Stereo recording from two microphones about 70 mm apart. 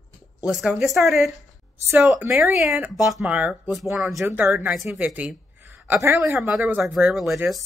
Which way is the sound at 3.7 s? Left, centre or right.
Centre.